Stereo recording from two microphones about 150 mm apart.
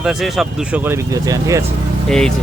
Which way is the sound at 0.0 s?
Centre (ahead or behind).